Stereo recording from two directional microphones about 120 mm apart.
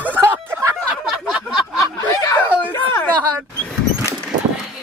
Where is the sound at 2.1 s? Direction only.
30° left (ahead or behind).